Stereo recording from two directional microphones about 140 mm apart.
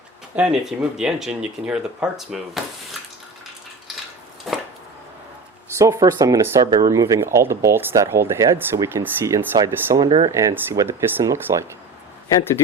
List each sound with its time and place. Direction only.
0.3 s speech: 5° right (ahead or behind)
4.5 s chopping: centre (ahead or behind)
5.7 s speech: 20° right (ahead or behind)
10.1 s speech: 40° right (ahead or behind)
10.3 s speech: 20° right (ahead or behind)